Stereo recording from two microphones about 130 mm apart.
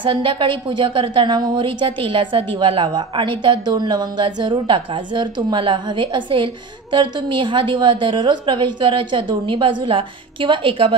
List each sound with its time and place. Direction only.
0.0 s a woman's voice: 40° right (ahead or behind)